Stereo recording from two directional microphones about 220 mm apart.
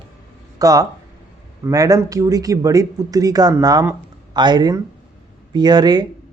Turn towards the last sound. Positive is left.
turn(degrees=-20)  # may be behind; listen again after turning